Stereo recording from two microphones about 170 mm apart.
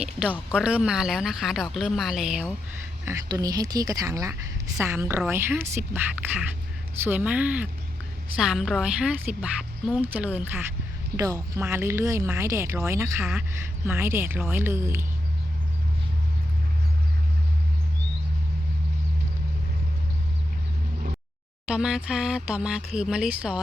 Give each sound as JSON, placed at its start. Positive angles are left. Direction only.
{"t": 0.0, "sound": "speech", "side_deg": -5}
{"t": 3.1, "sound": "speech", "side_deg": -20}
{"t": 21.7, "sound": "speech", "side_deg": -5}